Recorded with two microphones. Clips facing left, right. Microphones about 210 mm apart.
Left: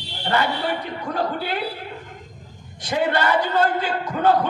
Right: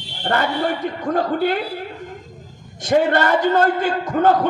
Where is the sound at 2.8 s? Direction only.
50° right (ahead or behind).